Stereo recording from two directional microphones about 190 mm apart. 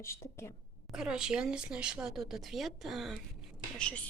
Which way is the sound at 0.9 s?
5° right (ahead or behind).